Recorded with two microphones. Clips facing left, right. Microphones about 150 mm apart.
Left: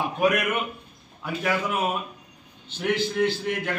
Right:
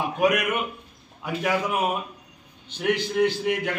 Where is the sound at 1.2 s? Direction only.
15° right (ahead or behind).